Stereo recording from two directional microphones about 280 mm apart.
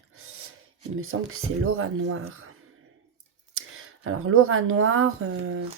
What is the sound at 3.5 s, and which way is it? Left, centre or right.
Speech, right.